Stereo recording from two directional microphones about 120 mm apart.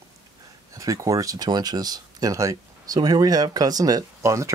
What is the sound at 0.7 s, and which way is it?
Speech, 30° right (ahead or behind).